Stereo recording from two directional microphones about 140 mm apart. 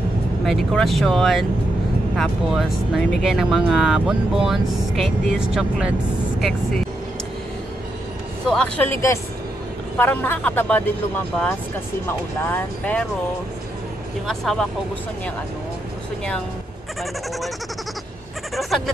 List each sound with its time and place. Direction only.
0.5 s speech: centre (ahead or behind)
8.5 s speech: 10° left (ahead or behind)
14.2 s speech: centre (ahead or behind)
18.5 s bleat: centre (ahead or behind)